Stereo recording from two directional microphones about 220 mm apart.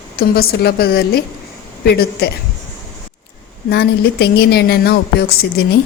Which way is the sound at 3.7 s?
50° left (ahead or behind).